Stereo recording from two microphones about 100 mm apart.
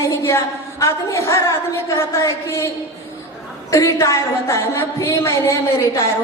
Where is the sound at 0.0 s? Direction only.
30° left (ahead or behind).